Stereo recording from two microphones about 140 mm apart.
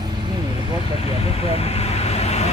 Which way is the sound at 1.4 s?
45° left (ahead or behind).